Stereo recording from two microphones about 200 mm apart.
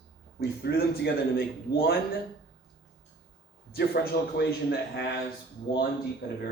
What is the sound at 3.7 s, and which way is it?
A man's voice, 50° left (ahead or behind).